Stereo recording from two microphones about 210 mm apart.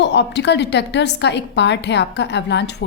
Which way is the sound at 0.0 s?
55° left (ahead or behind).